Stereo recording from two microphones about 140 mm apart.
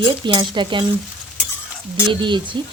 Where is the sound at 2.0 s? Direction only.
35° right (ahead or behind).